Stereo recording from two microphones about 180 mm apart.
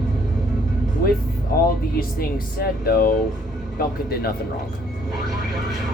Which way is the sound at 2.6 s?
55° left (ahead or behind).